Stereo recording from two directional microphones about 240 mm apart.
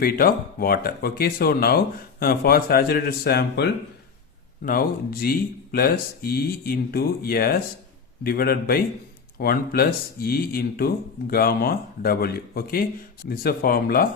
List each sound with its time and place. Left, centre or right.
0.0 s speech: left